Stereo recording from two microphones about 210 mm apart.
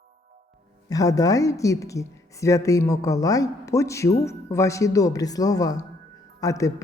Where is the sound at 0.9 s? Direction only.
15° left (ahead or behind).